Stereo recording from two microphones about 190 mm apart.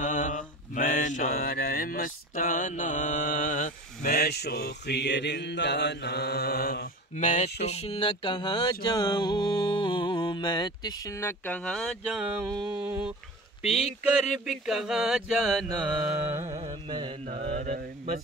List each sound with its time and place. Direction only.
0.0 s mantra: 40° left (ahead or behind)
7.6 s a sound: 30° left (ahead or behind); by 13.1 s 5° right (ahead or behind)
14.4 s mantra: centre (ahead or behind)
16.4 s mantra: 35° right (ahead or behind)